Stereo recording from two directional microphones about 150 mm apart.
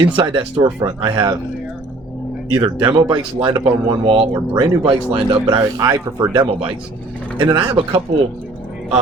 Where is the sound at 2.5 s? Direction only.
30° right (ahead or behind).